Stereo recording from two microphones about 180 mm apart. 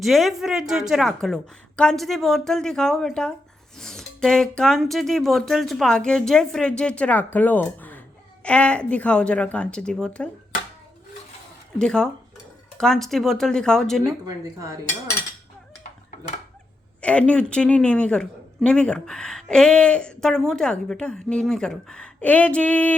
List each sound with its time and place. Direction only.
0.0 s a man's voice: centre (ahead or behind)
11.8 s a man's voice: 5° left (ahead or behind)
14.3 s speech: 20° right (ahead or behind)
17.0 s a man's voice: 5° left (ahead or behind)